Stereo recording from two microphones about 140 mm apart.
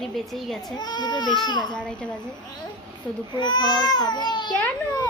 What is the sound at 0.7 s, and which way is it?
Speech, 30° left (ahead or behind).